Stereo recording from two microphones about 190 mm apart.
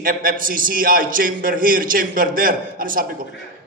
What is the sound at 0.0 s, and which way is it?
A man's voice, 50° right (ahead or behind).